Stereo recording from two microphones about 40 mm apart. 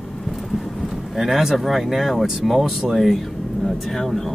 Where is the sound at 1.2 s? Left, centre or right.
Centre.